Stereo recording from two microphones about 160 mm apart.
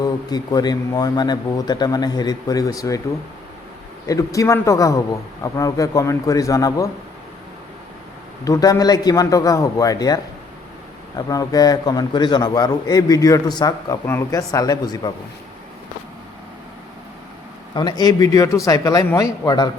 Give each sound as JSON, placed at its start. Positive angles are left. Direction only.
{"t": 0.0, "sound": "a man's voice", "side_deg": 25}
{"t": 4.0, "sound": "a man's voice", "side_deg": 20}
{"t": 8.4, "sound": "a man's voice", "side_deg": 20}
{"t": 11.2, "sound": "a man's voice", "side_deg": 25}
{"t": 17.7, "sound": "a man's voice", "side_deg": 25}